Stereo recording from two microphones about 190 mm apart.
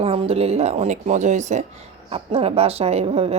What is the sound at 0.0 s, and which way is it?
A woman's voice, 30° right (ahead or behind).